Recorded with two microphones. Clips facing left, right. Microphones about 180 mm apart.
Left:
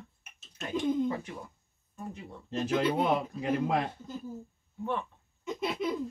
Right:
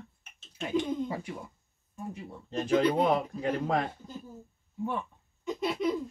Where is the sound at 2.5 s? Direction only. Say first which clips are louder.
Right 3 dB; 5° left (ahead or behind).